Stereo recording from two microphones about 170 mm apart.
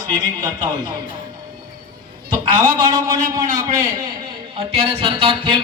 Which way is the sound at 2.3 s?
25° right (ahead or behind).